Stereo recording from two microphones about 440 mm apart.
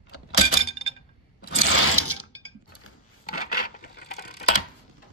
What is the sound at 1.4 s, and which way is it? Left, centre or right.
Sewing machine, left.